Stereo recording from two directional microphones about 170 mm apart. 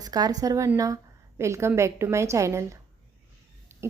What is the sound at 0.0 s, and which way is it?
A woman's voice, 20° right (ahead or behind).